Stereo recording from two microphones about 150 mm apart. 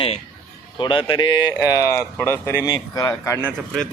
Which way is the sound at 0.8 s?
35° left (ahead or behind).